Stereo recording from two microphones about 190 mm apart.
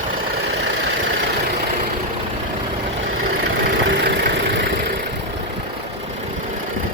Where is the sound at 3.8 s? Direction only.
65° right (ahead or behind).